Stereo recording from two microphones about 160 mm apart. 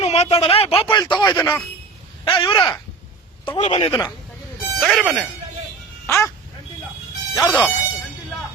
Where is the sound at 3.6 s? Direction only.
45° left (ahead or behind).